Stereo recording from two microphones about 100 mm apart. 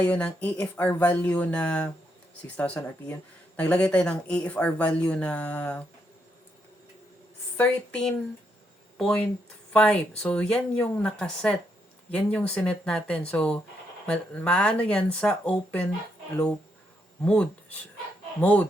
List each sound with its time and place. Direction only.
0.0 s speech: 15° left (ahead or behind)
7.5 s a woman's voice: 20° left (ahead or behind)
9.0 s speech: 10° left (ahead or behind)
17.2 s speech: 10° left (ahead or behind)